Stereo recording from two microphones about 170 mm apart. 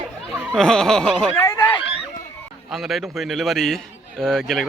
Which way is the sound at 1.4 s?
15° left (ahead or behind).